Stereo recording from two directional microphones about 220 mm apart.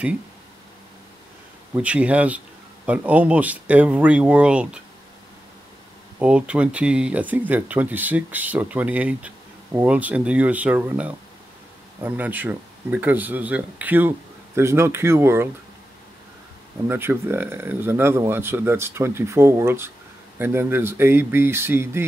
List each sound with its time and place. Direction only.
1.7 s speech: 5° right (ahead or behind)
6.1 s speech: 5° right (ahead or behind)
16.8 s speech: 10° right (ahead or behind)